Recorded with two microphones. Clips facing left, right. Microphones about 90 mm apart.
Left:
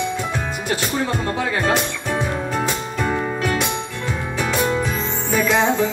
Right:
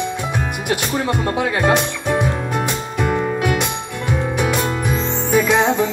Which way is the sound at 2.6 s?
10° right (ahead or behind).